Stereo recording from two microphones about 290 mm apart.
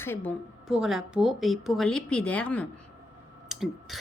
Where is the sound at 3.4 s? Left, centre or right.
Centre.